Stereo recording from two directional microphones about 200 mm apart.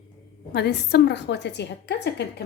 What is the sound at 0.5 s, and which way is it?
A woman's voice, 55° left (ahead or behind).